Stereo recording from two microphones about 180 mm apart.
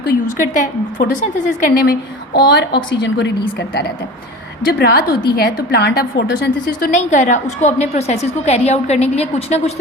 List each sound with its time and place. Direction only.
0.6 s a woman's voice: 45° left (ahead or behind); by 3.3 s 75° left (ahead or behind)
4.8 s a woman's voice: 55° left (ahead or behind); by 9.7 s 35° left (ahead or behind)